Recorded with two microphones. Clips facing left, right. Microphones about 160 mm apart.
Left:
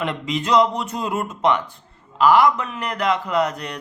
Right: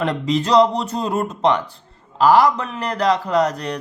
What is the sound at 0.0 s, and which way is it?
Speech, 35° right (ahead or behind).